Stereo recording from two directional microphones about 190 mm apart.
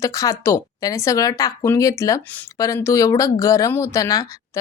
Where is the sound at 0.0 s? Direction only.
15° left (ahead or behind).